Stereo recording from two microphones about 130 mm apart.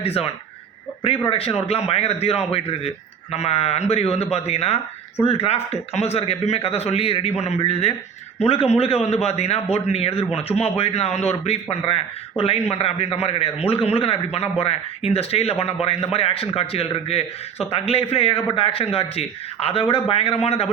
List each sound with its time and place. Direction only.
0.0 s a man's voice: 50° left (ahead or behind)
1.3 s a man's voice: 50° left (ahead or behind)